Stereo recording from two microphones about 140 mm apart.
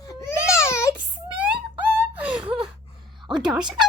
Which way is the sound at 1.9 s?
10° right (ahead or behind).